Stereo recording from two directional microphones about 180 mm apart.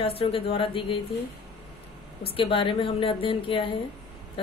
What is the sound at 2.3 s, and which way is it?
A woman's voice, 30° left (ahead or behind).